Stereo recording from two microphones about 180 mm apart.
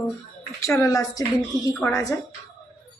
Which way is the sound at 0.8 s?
20° left (ahead or behind).